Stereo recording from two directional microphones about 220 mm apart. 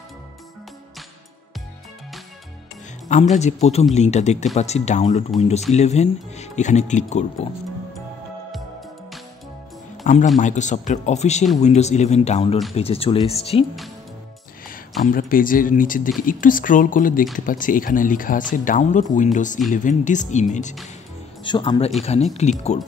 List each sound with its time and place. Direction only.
3.1 s speech: 30° left (ahead or behind)
10.0 s speech: 35° left (ahead or behind)
14.7 s speech: 40° left (ahead or behind)
21.5 s speech: 20° left (ahead or behind)